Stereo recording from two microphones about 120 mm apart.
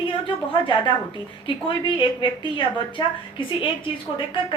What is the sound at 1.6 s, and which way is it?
A woman's voice, 40° left (ahead or behind).